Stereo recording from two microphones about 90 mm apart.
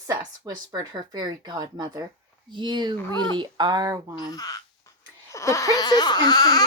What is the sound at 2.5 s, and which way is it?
A woman's voice, 60° right (ahead or behind).